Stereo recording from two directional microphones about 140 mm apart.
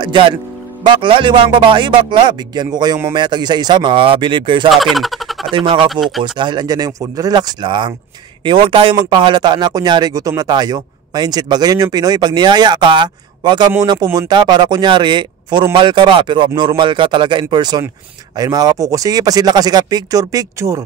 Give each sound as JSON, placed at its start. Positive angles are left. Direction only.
{"t": 0.0, "sound": "speech", "side_deg": -35}
{"t": 4.6, "sound": "speech", "side_deg": 0}
{"t": 5.5, "sound": "speech", "side_deg": -35}